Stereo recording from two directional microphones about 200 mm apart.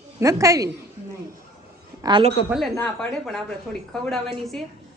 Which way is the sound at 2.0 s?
25° right (ahead or behind).